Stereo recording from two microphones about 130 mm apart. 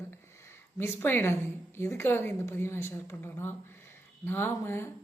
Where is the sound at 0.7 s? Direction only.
20° left (ahead or behind).